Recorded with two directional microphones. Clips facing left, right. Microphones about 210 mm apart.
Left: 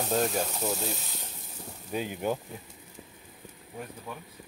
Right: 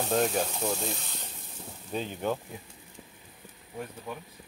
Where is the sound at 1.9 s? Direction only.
10° left (ahead or behind).